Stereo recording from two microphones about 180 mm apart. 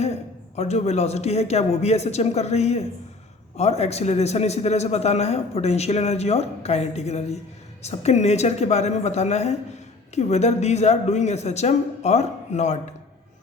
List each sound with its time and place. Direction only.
0.0 s a man's voice: 35° left (ahead or behind)